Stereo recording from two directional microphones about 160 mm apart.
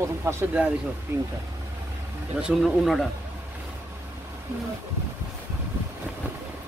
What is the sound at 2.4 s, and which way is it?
Speech, centre (ahead or behind).